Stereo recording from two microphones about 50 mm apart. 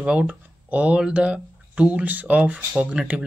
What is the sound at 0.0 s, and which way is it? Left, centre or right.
Speech, right.